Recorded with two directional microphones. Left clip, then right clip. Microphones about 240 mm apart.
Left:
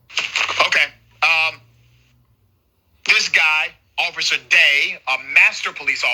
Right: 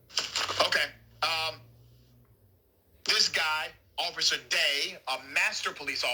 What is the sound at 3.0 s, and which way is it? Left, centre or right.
A man's voice, centre.